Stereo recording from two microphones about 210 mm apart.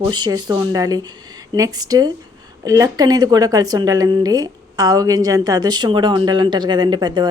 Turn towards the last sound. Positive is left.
turn(degrees=-20)  # may be behind; listen again after turning